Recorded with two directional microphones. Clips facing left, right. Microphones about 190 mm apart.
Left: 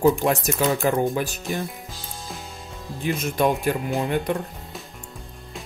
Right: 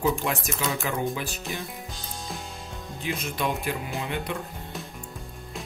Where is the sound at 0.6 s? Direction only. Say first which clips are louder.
Left 8 dB; 40° left (ahead or behind).